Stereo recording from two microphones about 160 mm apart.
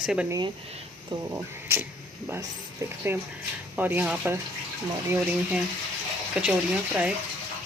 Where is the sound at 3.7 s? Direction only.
10° right (ahead or behind).